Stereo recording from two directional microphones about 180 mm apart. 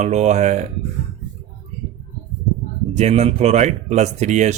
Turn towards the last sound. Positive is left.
turn(degrees=-40)  # may be behind; listen again after turning